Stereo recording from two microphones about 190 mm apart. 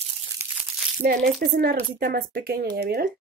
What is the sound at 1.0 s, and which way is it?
Speech, 55° right (ahead or behind).